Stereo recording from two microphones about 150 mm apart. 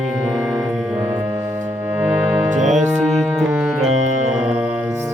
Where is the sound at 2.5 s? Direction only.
55° right (ahead or behind).